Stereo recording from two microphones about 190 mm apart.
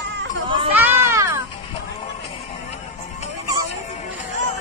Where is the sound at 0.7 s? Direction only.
10° right (ahead or behind).